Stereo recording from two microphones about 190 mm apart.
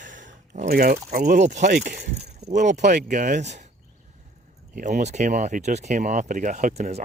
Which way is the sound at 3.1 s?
40° right (ahead or behind).